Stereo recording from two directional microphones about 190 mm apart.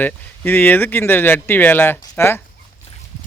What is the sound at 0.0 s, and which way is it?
Speech, 10° left (ahead or behind).